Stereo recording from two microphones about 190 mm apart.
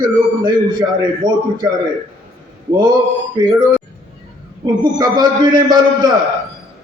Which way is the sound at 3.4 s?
20° right (ahead or behind).